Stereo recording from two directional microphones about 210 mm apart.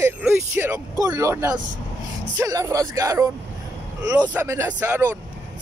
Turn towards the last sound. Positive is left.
turn(degrees=-10)  # may be behind; listen again after turning